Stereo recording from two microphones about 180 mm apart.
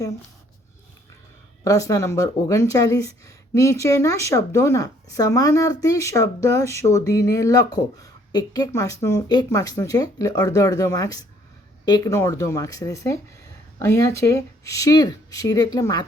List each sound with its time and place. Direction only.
1.6 s speech: 20° left (ahead or behind)